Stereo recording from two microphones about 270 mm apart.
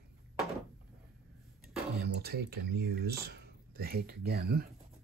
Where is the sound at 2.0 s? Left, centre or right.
Right.